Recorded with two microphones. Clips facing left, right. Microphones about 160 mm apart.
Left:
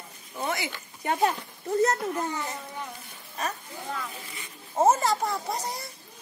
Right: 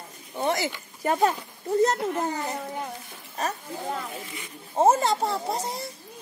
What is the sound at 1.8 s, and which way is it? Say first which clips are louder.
Speech: right 2 dB; 25° right (ahead or behind).